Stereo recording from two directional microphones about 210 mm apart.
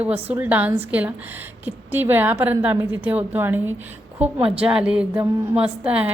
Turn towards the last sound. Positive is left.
turn(degrees=-5)  # may be behind; listen again after turning